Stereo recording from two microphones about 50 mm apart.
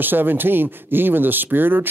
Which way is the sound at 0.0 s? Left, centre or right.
Right.